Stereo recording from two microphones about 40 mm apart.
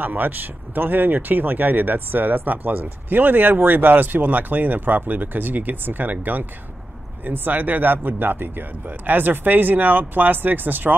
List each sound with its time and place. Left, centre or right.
0.0 s speech: right